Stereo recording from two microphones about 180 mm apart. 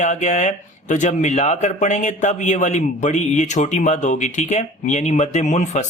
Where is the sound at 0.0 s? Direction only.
40° left (ahead or behind).